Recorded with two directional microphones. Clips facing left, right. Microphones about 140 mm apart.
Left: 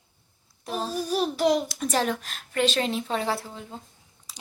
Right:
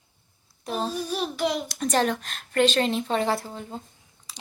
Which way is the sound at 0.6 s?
5° left (ahead or behind).